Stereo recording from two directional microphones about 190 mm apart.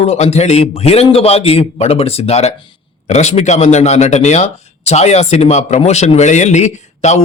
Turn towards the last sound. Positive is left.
turn(degrees=35)  # may be behind; listen again after turning